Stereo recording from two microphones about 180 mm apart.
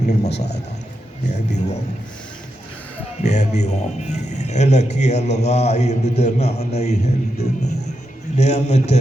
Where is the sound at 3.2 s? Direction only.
40° left (ahead or behind).